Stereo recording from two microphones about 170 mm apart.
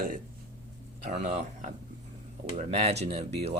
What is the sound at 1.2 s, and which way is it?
Speech, 45° right (ahead or behind).